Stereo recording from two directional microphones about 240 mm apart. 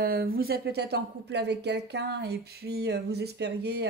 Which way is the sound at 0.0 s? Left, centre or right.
Right.